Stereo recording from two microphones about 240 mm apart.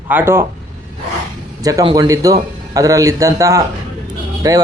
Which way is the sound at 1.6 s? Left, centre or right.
Centre.